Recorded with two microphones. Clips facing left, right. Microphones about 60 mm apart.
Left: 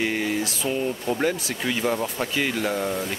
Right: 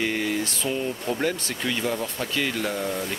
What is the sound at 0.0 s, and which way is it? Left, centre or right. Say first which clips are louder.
Speech: left 1 dB; centre.